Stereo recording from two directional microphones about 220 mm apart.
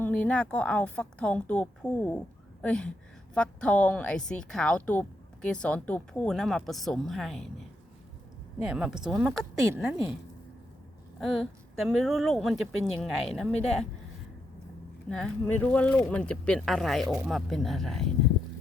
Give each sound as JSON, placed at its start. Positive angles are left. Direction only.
{"t": 0.0, "sound": "a woman's voice", "side_deg": 5}
{"t": 8.6, "sound": "a woman's voice", "side_deg": -5}
{"t": 11.2, "sound": "a woman's voice", "side_deg": 0}
{"t": 15.1, "sound": "a woman's voice", "side_deg": 5}